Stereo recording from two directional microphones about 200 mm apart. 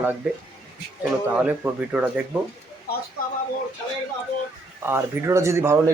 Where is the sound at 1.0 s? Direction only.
5° right (ahead or behind).